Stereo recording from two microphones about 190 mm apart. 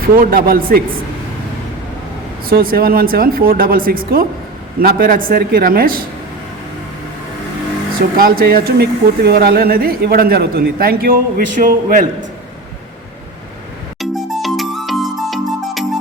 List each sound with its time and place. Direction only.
0.2 s speech: 50° right (ahead or behind)
2.5 s speech: 50° right (ahead or behind)
8.1 s speech: 50° right (ahead or behind)
14.0 s music: centre (ahead or behind)